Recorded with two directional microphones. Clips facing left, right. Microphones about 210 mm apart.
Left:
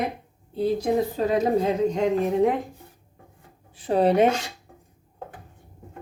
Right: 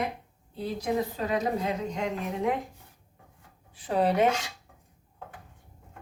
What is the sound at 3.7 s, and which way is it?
Speech, 25° left (ahead or behind).